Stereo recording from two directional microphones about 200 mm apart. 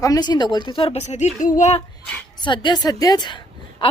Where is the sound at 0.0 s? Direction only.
20° left (ahead or behind); by 1.8 s 35° left (ahead or behind).